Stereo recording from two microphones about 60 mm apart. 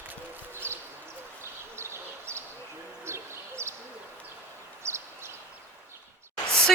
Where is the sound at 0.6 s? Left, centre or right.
Right.